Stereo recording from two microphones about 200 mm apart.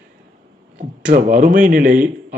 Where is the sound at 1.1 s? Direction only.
40° right (ahead or behind).